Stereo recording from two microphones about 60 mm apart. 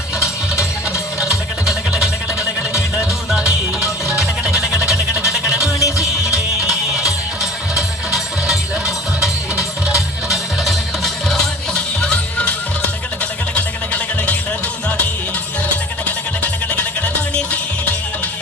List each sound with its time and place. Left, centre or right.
0.2 s music: left
3.4 s music: left
7.8 s music: centre
10.2 s music: centre
13.6 s music: left
16.0 s music: left